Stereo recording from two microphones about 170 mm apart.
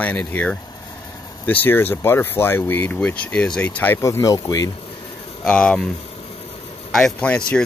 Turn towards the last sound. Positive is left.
turn(degrees=5)  # may be behind; listen again after turning